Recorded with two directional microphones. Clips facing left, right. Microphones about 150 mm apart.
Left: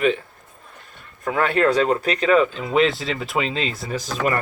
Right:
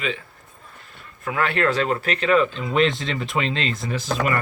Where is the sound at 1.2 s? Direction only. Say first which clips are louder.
Left 3 dB; 40° left (ahead or behind).